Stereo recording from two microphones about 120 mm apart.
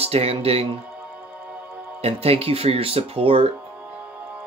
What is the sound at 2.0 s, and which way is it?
Speech, 55° right (ahead or behind).